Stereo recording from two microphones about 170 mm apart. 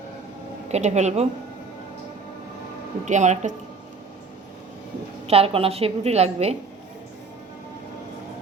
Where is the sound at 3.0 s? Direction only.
45° right (ahead or behind).